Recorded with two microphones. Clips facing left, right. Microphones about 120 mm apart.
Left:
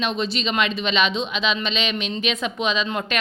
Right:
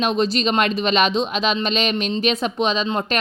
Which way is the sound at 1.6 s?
40° right (ahead or behind).